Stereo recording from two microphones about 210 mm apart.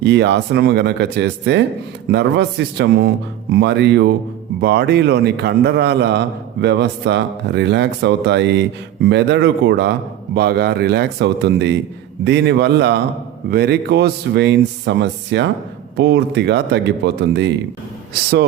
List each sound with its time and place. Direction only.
0.0 s a man's voice: 55° right (ahead or behind)
18.1 s a man's voice: 50° right (ahead or behind)